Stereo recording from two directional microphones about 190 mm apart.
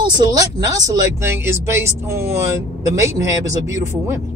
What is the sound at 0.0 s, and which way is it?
Speech, 20° right (ahead or behind).